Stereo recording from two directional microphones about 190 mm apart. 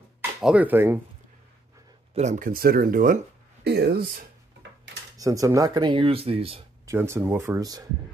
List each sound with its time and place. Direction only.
0.4 s speech: 5° right (ahead or behind)
2.1 s speech: 40° right (ahead or behind)
3.6 s speech: 60° right (ahead or behind)
5.1 s speech: 15° right (ahead or behind)
6.9 s speech: 15° right (ahead or behind)